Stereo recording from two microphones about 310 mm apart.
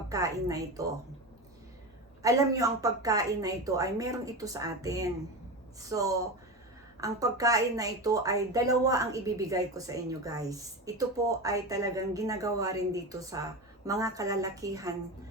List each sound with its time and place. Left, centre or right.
0.1 s a woman's voice: centre
2.2 s a woman's voice: centre